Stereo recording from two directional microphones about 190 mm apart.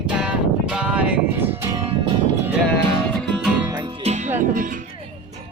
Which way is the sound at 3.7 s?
20° right (ahead or behind).